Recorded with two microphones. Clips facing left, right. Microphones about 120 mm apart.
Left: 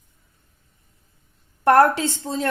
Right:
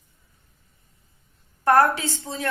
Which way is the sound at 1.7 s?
60° left (ahead or behind).